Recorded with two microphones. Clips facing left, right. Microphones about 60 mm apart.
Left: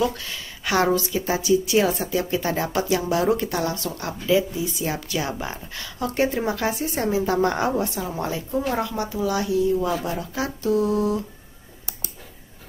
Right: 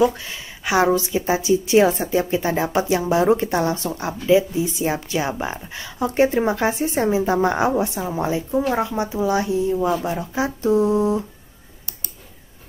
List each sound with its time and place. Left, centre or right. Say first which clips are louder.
0.0 s a woman's voice: right 5 dB; centre